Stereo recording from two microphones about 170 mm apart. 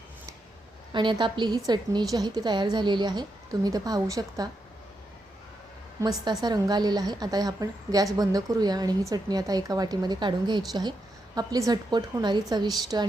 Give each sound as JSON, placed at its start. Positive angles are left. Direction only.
{"t": 0.9, "sound": "a woman's voice", "side_deg": -25}
{"t": 6.0, "sound": "a woman's voice", "side_deg": -25}